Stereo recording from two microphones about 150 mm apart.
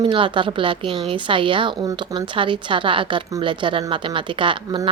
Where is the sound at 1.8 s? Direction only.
25° right (ahead or behind).